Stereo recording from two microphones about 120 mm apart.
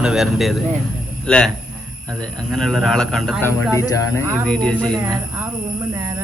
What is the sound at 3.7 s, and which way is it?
Speech, 25° left (ahead or behind).